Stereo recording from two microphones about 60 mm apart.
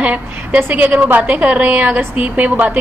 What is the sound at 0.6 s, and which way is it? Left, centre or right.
A woman's voice, right.